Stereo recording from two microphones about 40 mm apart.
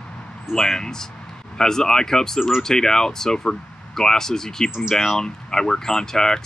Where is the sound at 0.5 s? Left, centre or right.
Centre.